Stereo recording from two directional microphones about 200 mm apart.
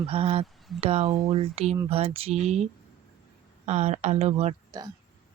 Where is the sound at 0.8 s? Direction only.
30° right (ahead or behind).